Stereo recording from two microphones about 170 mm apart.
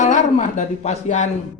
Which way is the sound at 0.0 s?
45° left (ahead or behind).